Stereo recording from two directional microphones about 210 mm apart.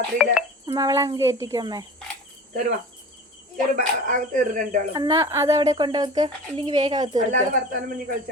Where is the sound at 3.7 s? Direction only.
40° right (ahead or behind).